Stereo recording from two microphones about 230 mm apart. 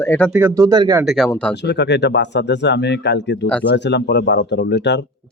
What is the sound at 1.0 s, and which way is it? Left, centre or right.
Speech, centre.